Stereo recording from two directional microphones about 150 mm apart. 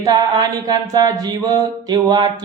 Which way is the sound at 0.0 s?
25° right (ahead or behind).